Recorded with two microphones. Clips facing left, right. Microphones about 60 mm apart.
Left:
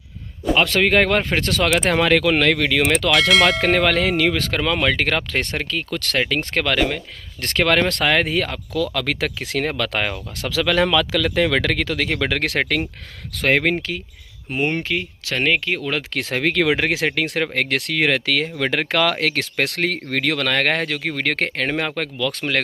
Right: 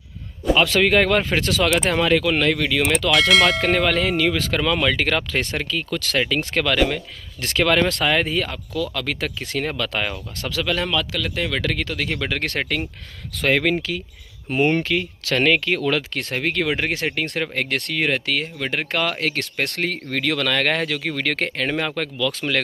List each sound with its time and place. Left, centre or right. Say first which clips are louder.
0.7 s speech: even; left
1.4 s speech: left 1 dB; left
3.1 s speech: even; centre
3.6 s speech: left 2 dB; left
4.6 s speech: right 1 dB; left
7.4 s speech: left 1 dB; left
8.9 s speech: left 3 dB; left
9.8 s speech: left 2 dB; left
10.4 s speech: left 5 dB; left
13.5 s speech: left 1 dB; left
14.8 s speech: right 2 dB; left
16.2 s speech: left 3 dB; left